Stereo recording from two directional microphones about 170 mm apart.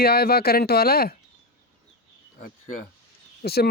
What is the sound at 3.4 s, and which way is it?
Speech, 65° left (ahead or behind).